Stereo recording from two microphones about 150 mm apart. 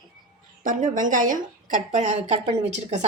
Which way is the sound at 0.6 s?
60° right (ahead or behind).